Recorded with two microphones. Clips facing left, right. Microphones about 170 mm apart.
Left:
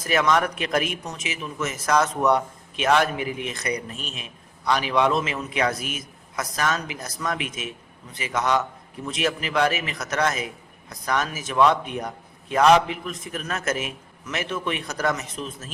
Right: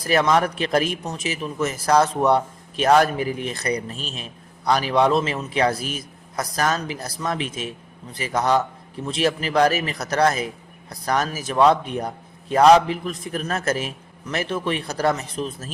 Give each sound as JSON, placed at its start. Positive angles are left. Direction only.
{"t": 0.0, "sound": "a man's voice", "side_deg": -35}